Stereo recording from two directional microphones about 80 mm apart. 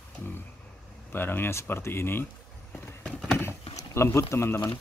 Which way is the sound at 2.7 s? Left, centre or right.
Centre.